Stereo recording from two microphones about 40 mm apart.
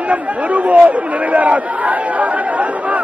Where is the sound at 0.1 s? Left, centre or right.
Right.